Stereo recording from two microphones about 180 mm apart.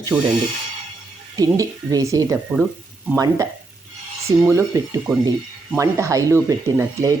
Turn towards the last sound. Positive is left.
turn(degrees=-20)  # may be behind; listen again after turning